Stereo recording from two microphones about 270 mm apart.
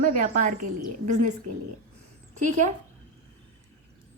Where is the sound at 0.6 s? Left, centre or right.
Right.